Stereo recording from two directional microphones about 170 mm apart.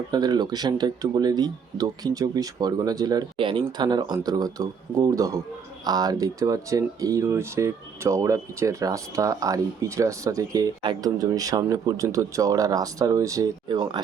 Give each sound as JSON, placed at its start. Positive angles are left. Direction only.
{"t": 0.1, "sound": "speech", "side_deg": -25}